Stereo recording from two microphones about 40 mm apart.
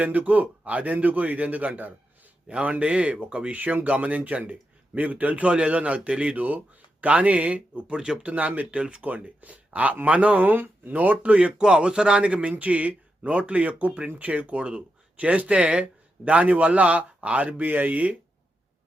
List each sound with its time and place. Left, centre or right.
0.0 s a man's voice: right
6.3 s speech: right
7.9 s speech: centre
8.2 s a man's voice: right
17.7 s speech: right